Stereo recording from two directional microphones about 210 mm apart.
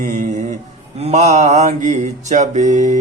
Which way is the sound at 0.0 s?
35° right (ahead or behind).